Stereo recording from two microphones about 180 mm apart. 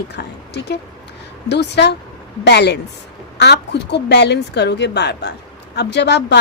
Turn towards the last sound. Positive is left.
turn(degrees=70)  # may be behind; listen again after turning